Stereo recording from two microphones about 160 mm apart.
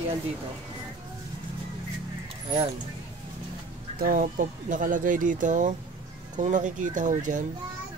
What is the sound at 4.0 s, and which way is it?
Speech, 55° right (ahead or behind).